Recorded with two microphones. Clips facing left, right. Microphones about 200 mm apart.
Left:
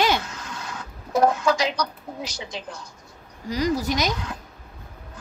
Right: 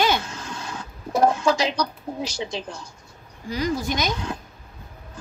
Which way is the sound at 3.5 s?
40° left (ahead or behind).